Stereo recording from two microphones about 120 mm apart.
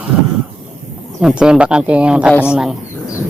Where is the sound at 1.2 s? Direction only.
5° right (ahead or behind).